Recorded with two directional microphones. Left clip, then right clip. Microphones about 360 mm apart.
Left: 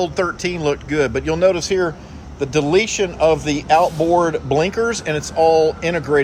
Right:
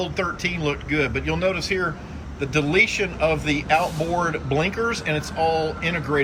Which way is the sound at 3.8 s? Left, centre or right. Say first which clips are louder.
Left 8 dB; left.